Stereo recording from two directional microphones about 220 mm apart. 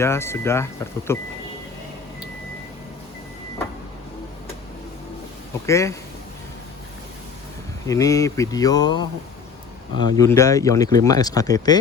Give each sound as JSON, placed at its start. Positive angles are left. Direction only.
{"t": 0.0, "sound": "speech", "side_deg": 10}
{"t": 5.6, "sound": "speech", "side_deg": 15}
{"t": 7.9, "sound": "speech", "side_deg": 15}
{"t": 10.2, "sound": "speech", "side_deg": 15}